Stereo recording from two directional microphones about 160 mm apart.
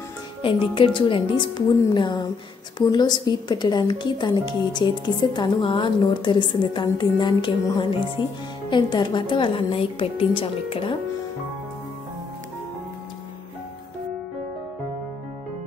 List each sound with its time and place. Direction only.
0.4 s a woman's voice: 35° left (ahead or behind)